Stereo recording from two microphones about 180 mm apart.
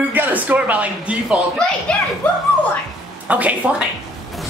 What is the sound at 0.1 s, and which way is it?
Speech, 10° right (ahead or behind).